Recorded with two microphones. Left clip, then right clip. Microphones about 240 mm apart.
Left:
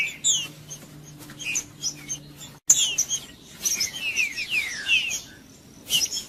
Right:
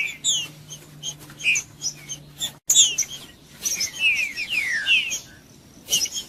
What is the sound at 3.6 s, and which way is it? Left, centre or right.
Bird, centre.